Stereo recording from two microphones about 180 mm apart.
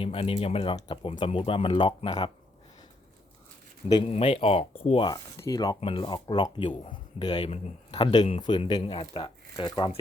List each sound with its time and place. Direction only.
0.0 s speech: 30° left (ahead or behind)
3.8 s speech: 30° left (ahead or behind)
5.0 s speech: 20° left (ahead or behind)